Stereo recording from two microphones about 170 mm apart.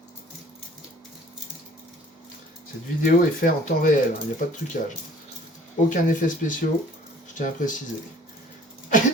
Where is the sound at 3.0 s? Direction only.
55° left (ahead or behind).